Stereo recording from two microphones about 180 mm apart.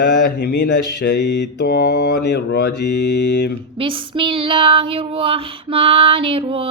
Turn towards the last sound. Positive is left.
turn(degrees=-30)  # may be behind; listen again after turning